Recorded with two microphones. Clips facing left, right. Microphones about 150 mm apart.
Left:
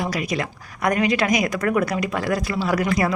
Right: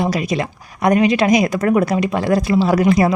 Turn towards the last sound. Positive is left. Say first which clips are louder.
# right 7 dB
turn(degrees=-25)  # may be behind; listen again after turning